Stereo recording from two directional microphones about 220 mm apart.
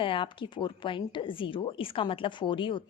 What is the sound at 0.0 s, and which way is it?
Speech, 25° left (ahead or behind).